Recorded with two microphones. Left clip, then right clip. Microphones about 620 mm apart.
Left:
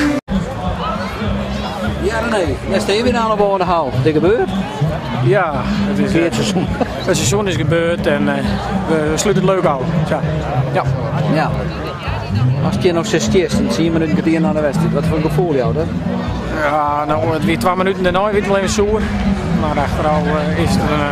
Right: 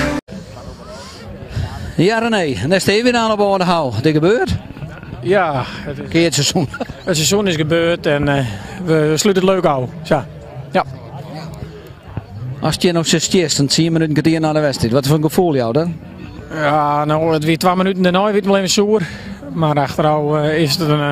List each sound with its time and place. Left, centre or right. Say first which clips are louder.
2.9 s speech: even; right
5.3 s a man's voice: right 1 dB; right
6.2 s speech: right 1 dB; right
7.1 s a man's voice: right 3 dB; right
12.6 s speech: right 1 dB; right
16.5 s speech: right 1 dB; right